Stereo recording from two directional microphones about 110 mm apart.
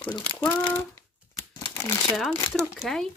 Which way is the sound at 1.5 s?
25° left (ahead or behind).